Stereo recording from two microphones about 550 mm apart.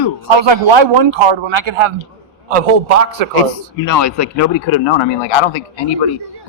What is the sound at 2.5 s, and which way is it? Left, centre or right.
Speech, right.